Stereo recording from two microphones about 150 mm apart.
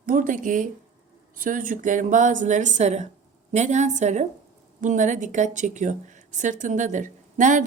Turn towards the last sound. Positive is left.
turn(degrees=-55)  # may be behind; listen again after turning